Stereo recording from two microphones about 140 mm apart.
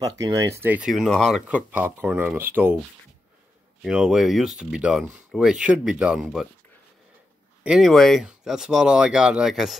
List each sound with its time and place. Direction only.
0.0 s speech: 25° right (ahead or behind); by 1.4 s centre (ahead or behind)
1.5 s speech: 10° right (ahead or behind)
3.8 s speech: 5° right (ahead or behind)
7.6 s speech: 5° right (ahead or behind)